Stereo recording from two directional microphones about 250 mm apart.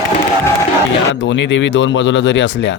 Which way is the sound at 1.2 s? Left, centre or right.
Left.